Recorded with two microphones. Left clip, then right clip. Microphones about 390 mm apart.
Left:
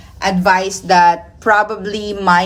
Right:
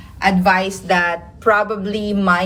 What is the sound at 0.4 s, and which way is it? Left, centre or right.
A woman's voice, centre.